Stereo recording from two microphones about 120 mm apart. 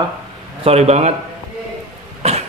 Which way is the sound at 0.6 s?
60° right (ahead or behind).